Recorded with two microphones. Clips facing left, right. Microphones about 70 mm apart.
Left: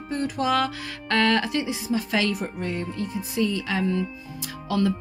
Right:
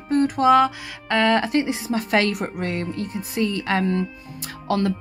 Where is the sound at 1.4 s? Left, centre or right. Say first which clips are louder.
Right 4 dB; right.